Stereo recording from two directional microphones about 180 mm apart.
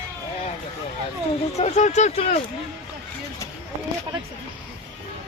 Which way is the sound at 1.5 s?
40° left (ahead or behind).